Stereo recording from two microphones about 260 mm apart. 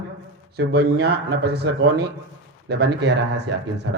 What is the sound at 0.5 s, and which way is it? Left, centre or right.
Speech, right.